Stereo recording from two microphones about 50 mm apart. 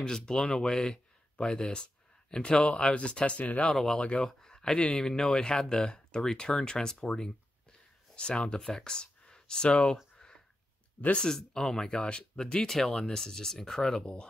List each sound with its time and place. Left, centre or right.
0.0 s speech: centre; by 3.7 s left
3.7 s speech: centre
10.1 s a sound: centre
11.1 s speech: centre